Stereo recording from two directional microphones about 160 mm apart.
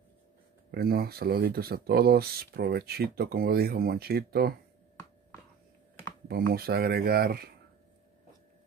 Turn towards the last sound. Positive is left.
turn(degrees=-70)  # may be behind; listen again after turning